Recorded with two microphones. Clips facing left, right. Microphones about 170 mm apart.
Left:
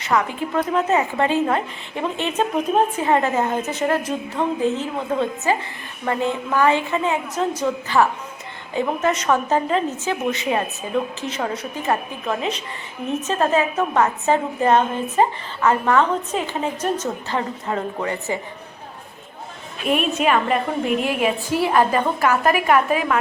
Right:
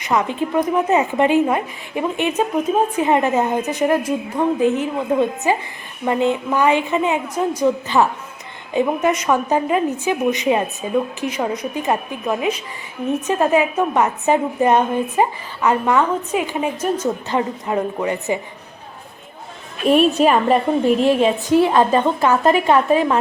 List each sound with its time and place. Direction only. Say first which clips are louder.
0.0 s speech: right 2 dB; 20° right (ahead or behind)
19.9 s a woman's voice: right 5 dB; 35° right (ahead or behind)